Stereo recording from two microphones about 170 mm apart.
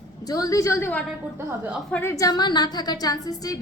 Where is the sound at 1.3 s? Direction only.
10° right (ahead or behind).